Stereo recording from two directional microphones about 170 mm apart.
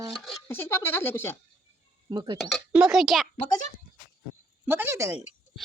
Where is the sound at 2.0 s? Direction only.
25° right (ahead or behind).